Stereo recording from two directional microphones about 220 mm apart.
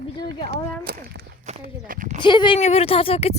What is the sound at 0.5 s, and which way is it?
Speech, 45° right (ahead or behind).